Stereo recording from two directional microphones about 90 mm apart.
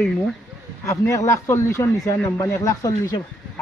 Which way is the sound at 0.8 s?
35° left (ahead or behind).